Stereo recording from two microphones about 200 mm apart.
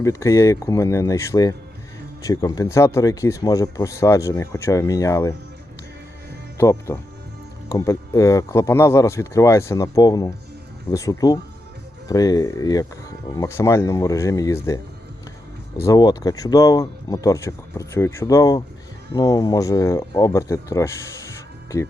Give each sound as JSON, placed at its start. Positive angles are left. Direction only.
{"t": 0.0, "sound": "speech", "side_deg": 15}
{"t": 6.6, "sound": "speech", "side_deg": 15}
{"t": 15.8, "sound": "speech", "side_deg": 20}